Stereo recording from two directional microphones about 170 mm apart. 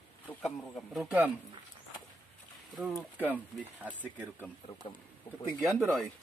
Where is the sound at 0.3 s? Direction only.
10° left (ahead or behind).